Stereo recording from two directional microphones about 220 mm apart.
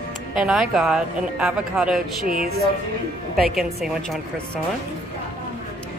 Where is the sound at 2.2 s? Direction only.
40° right (ahead or behind).